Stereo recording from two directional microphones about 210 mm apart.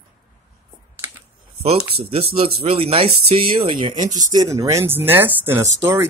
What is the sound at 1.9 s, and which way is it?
Speech, 25° right (ahead or behind).